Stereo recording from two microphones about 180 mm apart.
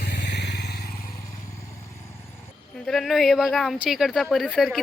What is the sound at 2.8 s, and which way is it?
Speech, centre (ahead or behind).